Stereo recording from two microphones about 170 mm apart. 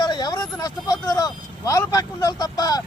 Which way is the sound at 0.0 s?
25° left (ahead or behind).